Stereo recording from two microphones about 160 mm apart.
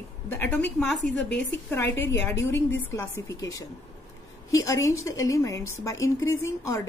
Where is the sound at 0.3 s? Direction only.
10° left (ahead or behind).